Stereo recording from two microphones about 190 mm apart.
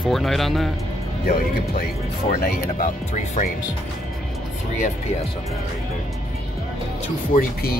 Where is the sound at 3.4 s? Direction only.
40° left (ahead or behind).